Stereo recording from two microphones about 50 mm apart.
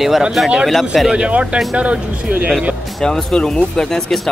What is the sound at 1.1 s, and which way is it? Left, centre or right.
Speech, right.